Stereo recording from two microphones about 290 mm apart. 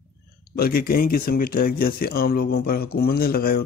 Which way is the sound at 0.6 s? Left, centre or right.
Left.